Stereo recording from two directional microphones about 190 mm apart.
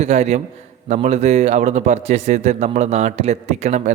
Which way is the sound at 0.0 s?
35° right (ahead or behind).